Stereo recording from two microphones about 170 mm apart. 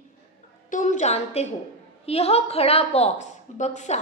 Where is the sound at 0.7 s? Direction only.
45° left (ahead or behind).